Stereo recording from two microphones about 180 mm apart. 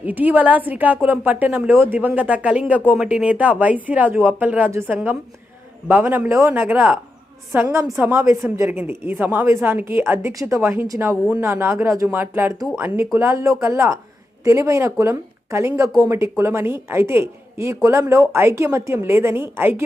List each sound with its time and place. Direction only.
0.0 s a woman's voice: 10° right (ahead or behind)